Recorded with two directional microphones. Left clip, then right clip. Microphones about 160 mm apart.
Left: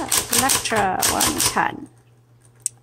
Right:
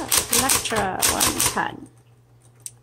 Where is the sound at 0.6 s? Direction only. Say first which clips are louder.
Left 3 dB; 15° left (ahead or behind).